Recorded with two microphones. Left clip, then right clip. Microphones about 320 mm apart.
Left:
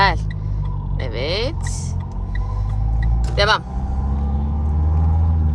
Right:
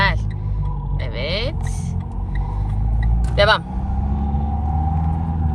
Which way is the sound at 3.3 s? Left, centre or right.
Centre.